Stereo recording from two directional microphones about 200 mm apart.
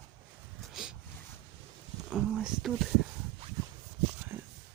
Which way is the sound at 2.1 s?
5° right (ahead or behind).